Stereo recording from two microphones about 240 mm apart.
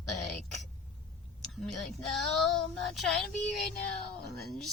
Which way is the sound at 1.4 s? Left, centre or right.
Centre.